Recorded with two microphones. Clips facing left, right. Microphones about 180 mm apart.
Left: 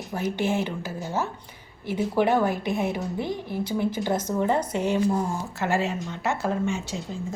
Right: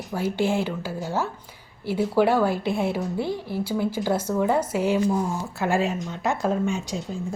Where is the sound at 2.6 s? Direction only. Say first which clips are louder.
Right 2 dB; 15° left (ahead or behind).